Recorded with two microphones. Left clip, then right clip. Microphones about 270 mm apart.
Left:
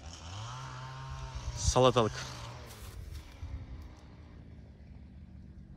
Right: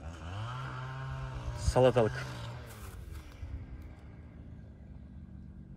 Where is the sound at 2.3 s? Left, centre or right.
Left.